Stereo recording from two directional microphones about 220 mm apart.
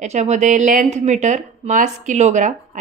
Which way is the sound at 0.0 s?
30° right (ahead or behind).